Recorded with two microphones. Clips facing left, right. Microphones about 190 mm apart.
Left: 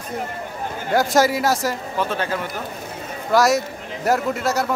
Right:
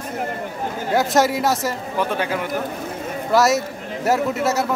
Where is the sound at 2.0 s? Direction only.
15° right (ahead or behind).